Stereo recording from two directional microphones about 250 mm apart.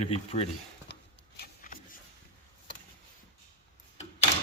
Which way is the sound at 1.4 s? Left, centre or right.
Left.